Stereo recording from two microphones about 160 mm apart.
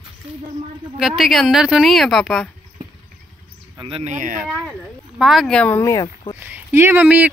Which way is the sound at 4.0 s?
50° right (ahead or behind).